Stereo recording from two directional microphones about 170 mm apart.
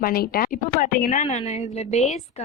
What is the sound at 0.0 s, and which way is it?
Speech, 60° left (ahead or behind).